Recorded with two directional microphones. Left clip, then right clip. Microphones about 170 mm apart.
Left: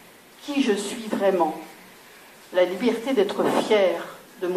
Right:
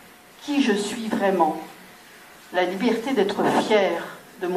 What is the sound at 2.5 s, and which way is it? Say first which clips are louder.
A woman's voice: left 1 dB; 35° right (ahead or behind).